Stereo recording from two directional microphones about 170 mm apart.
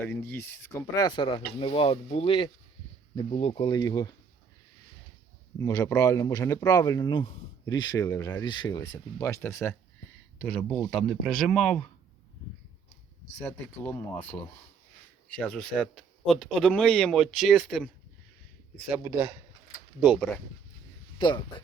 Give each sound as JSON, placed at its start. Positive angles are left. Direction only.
{"t": 0.0, "sound": "speech", "side_deg": 10}
{"t": 5.5, "sound": "a man's voice", "side_deg": 20}
{"t": 13.4, "sound": "a man's voice", "side_deg": 10}
{"t": 18.9, "sound": "a man's voice", "side_deg": -15}
{"t": 21.2, "sound": "speech", "side_deg": 25}